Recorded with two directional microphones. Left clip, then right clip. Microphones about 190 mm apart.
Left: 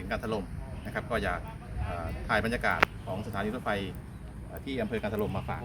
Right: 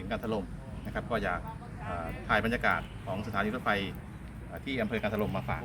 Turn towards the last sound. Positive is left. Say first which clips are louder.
# even
turn(degrees=0)  # may be behind; listen again after turning